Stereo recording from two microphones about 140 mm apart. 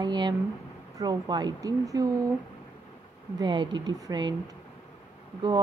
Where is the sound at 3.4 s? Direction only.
35° right (ahead or behind).